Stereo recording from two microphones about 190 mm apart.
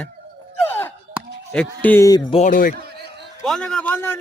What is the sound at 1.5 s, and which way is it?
Speech, 5° left (ahead or behind).